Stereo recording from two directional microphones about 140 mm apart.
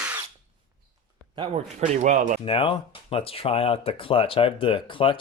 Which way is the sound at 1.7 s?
55° right (ahead or behind).